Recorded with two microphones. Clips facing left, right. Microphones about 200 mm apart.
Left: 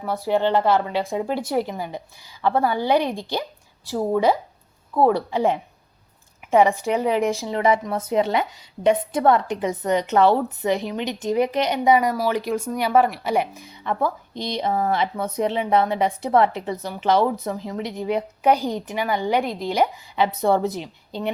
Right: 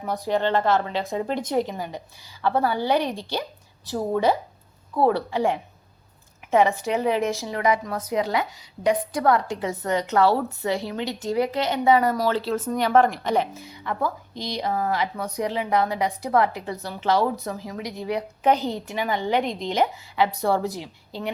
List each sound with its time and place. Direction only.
0.2 s a woman's voice: 10° left (ahead or behind)